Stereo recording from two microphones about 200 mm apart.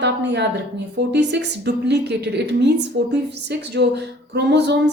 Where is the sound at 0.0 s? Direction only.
55° right (ahead or behind).